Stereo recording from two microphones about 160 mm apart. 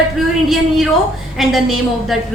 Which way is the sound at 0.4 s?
Centre (ahead or behind).